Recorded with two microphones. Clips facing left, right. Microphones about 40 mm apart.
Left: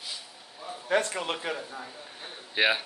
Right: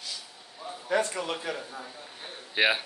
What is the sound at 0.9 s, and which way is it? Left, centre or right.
Speech, left.